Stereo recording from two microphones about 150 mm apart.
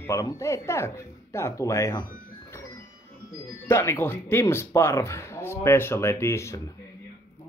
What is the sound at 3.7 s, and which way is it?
Speech, 15° left (ahead or behind).